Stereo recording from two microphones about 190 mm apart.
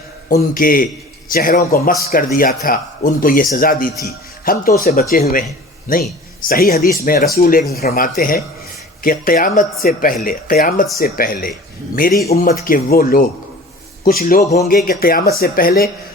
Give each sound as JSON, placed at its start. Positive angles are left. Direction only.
{"t": 0.5, "sound": "speech", "side_deg": 45}
{"t": 6.4, "sound": "speech", "side_deg": 50}